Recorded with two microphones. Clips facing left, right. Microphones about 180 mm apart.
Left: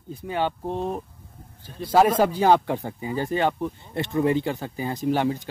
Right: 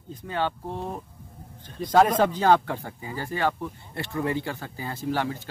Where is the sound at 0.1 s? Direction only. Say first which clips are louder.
Left 2 dB; 15° left (ahead or behind).